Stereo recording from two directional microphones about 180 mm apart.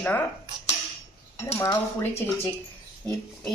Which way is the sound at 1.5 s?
15° left (ahead or behind).